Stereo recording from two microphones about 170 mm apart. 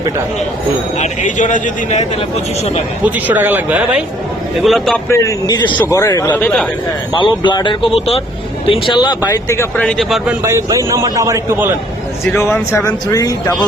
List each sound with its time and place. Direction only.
0.9 s a man's voice: 45° left (ahead or behind)
3.0 s a man's voice: 10° right (ahead or behind)
5.0 s speech: 15° left (ahead or behind)
6.4 s a man's voice: 5° left (ahead or behind)
7.1 s speech: 25° left (ahead or behind); by 10.3 s centre (ahead or behind)
10.4 s a man's voice: 15° right (ahead or behind)
12.2 s speech: 15° left (ahead or behind)